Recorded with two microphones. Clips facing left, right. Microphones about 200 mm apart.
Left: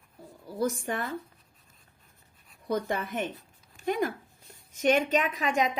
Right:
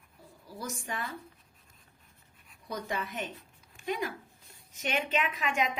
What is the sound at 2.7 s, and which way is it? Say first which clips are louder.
A woman's voice: left 6 dB; 55° left (ahead or behind).